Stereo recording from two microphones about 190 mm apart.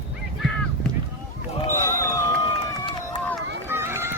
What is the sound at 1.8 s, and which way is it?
Basketball bounce, 15° left (ahead or behind).